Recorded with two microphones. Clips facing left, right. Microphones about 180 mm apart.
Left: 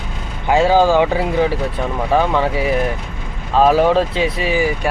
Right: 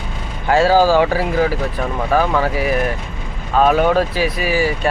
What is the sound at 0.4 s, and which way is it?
Speech, 20° left (ahead or behind).